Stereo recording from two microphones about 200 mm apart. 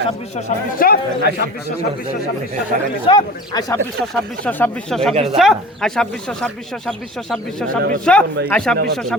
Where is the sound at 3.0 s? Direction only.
25° left (ahead or behind).